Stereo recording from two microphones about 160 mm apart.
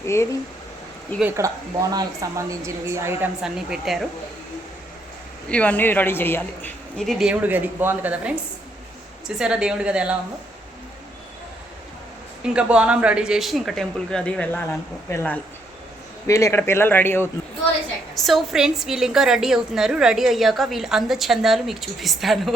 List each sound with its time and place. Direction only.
0.0 s a man's voice: 15° left (ahead or behind)
1.4 s a woman's voice: 20° right (ahead or behind)
3.4 s a woman's voice: 5° right (ahead or behind)
5.5 s a man's voice: 10° left (ahead or behind); by 10.2 s 5° right (ahead or behind)
12.4 s a woman's voice: 5° right (ahead or behind); by 17.2 s 15° left (ahead or behind)
18.1 s a woman's voice: centre (ahead or behind)